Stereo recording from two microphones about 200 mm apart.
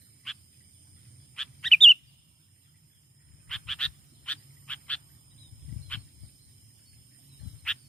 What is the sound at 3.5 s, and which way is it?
Frog, 5° left (ahead or behind).